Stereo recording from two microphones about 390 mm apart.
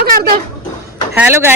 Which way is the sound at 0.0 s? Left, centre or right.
Right.